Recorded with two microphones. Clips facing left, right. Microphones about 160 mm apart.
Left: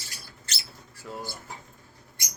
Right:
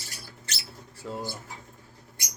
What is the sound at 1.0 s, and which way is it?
Speech, 20° right (ahead or behind).